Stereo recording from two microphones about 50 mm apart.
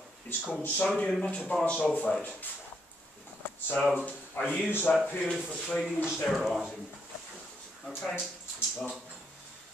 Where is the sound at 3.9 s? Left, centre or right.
Left.